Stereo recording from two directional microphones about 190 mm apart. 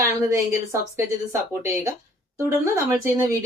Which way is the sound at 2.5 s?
15° right (ahead or behind).